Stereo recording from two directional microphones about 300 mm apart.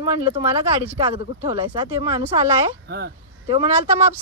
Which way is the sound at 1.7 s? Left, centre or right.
Centre.